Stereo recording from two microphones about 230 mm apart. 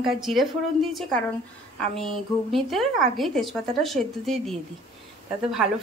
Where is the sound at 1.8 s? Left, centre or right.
Centre.